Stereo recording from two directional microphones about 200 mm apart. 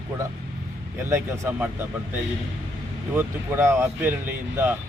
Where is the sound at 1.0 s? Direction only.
15° right (ahead or behind).